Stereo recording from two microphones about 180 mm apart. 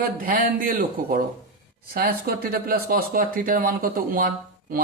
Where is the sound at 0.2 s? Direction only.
50° right (ahead or behind).